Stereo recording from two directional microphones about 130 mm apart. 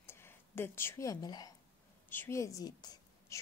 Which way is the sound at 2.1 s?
20° left (ahead or behind).